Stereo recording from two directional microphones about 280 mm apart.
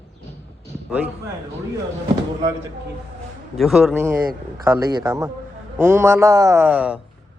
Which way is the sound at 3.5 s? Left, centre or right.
Centre.